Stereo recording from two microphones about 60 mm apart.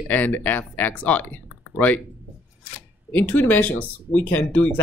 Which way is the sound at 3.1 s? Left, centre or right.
Left.